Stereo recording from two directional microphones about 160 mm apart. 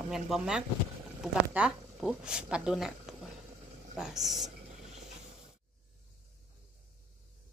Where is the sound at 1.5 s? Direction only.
5° right (ahead or behind).